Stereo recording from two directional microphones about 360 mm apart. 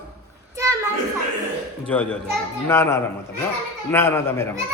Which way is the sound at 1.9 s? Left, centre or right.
Centre.